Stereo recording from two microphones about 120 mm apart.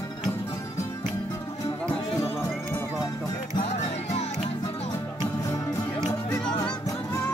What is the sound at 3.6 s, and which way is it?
Music, 65° left (ahead or behind).